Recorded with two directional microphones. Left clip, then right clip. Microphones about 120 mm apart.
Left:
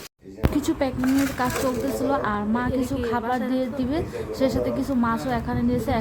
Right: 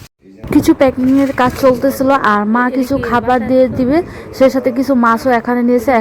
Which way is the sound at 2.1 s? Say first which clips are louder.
Right 15 dB; 70° right (ahead or behind).